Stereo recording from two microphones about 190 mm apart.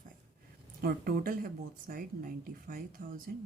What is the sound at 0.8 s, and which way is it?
A woman's voice, 50° right (ahead or behind).